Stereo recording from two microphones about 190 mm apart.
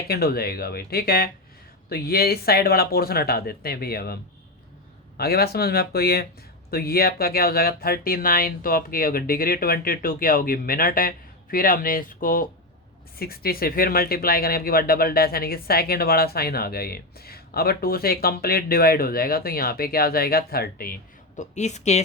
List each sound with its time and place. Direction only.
0.1 s speech: 55° left (ahead or behind); by 22.0 s 35° left (ahead or behind)